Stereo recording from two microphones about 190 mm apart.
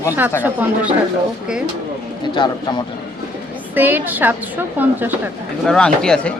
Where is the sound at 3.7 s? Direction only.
10° right (ahead or behind).